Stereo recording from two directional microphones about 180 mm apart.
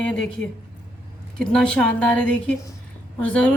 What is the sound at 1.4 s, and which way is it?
A woman's voice, 5° left (ahead or behind).